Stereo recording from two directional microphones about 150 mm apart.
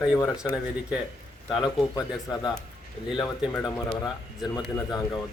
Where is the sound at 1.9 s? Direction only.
25° left (ahead or behind).